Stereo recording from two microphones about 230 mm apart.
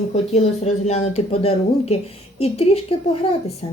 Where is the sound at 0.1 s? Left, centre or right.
Left.